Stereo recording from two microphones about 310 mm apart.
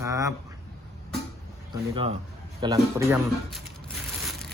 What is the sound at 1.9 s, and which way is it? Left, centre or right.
Speech, centre.